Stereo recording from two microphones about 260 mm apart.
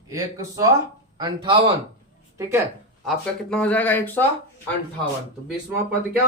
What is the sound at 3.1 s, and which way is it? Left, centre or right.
Speech, centre.